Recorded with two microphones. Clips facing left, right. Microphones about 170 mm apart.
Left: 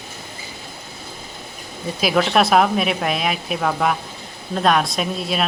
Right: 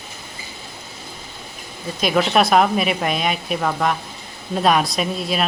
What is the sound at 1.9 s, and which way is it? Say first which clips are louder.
Speech: even; centre (ahead or behind).